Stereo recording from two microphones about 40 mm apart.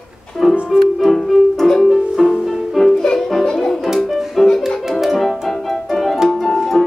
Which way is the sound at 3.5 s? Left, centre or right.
Centre.